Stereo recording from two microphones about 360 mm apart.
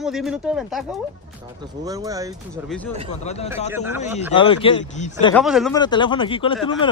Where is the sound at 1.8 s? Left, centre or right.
Centre.